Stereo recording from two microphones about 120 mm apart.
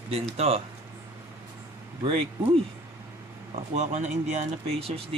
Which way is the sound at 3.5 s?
70° right (ahead or behind).